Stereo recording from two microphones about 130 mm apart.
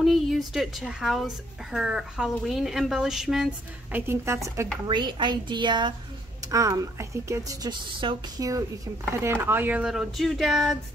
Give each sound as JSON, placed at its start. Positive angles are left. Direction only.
{"t": 0.0, "sound": "a woman's voice", "side_deg": 0}
{"t": 3.9, "sound": "a woman's voice", "side_deg": -20}
{"t": 4.8, "sound": "a woman's voice", "side_deg": -35}
{"t": 6.5, "sound": "a woman's voice", "side_deg": -25}
{"t": 8.0, "sound": "a woman's voice", "side_deg": -40}
{"t": 8.4, "sound": "a woman's voice", "side_deg": -25}